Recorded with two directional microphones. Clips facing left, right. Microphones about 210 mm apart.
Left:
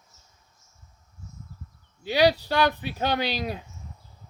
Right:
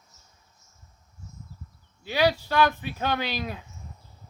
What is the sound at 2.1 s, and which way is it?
Speech, 35° left (ahead or behind).